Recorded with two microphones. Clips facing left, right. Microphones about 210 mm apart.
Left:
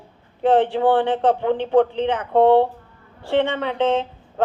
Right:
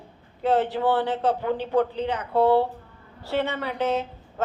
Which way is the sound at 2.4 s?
75° left (ahead or behind).